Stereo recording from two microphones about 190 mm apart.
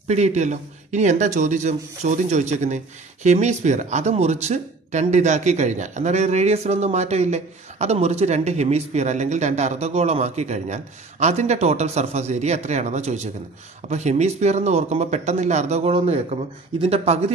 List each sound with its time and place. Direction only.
0.1 s speech: 35° right (ahead or behind)